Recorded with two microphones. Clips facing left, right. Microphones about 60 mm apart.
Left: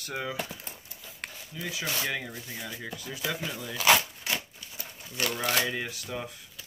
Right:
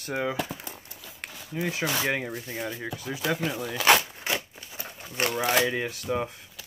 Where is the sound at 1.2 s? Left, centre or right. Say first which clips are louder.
Even; centre.